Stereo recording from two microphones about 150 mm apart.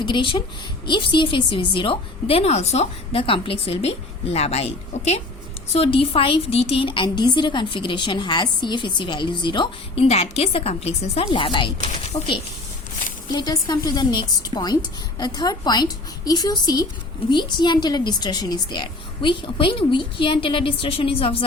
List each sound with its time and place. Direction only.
0.0 s a woman's voice: 30° left (ahead or behind)
10.0 s a woman's voice: 45° left (ahead or behind)
13.3 s a woman's voice: 30° left (ahead or behind)